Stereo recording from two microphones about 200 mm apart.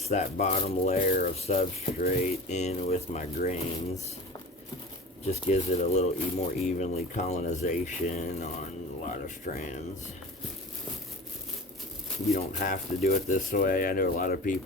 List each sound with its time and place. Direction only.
0.0 s speech: 35° left (ahead or behind)
5.2 s speech: 35° left (ahead or behind)
9.6 s speech: 35° left (ahead or behind)
12.3 s speech: 45° left (ahead or behind)